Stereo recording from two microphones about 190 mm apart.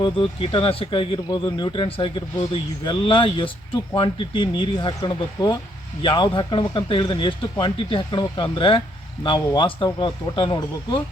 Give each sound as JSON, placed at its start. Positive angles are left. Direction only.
{"t": 0.0, "sound": "speech", "side_deg": 25}